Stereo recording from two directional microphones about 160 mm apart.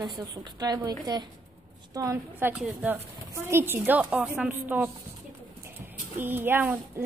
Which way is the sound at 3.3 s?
15° right (ahead or behind).